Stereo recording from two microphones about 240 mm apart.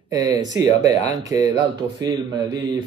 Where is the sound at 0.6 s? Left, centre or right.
Centre.